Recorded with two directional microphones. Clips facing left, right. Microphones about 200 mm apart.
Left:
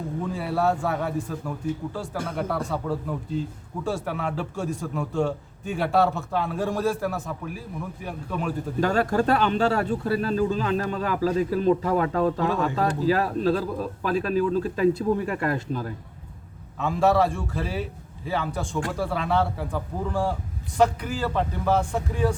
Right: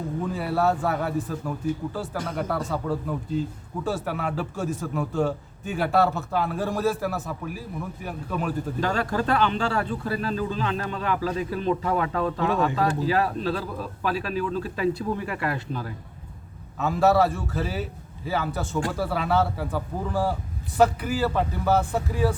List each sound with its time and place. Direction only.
0.3 s a man's voice: centre (ahead or behind)
8.8 s speech: 45° left (ahead or behind)
16.7 s a man's voice: 5° right (ahead or behind)